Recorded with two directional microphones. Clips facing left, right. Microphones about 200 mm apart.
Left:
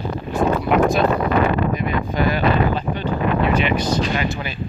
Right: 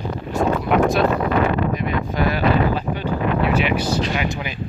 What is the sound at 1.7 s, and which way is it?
Speech, centre (ahead or behind).